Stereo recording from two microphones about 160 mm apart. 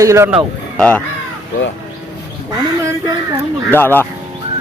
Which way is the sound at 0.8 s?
10° left (ahead or behind).